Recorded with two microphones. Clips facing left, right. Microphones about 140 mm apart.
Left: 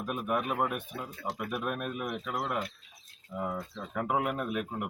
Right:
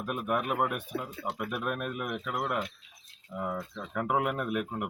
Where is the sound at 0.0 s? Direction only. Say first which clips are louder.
Right 1 dB; 5° right (ahead or behind).